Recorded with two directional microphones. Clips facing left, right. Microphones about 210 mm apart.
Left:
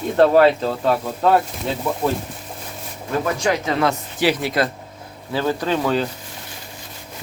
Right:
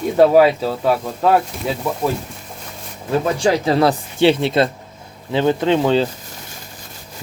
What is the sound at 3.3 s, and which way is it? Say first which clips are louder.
Speech: right 5 dB; 30° right (ahead or behind).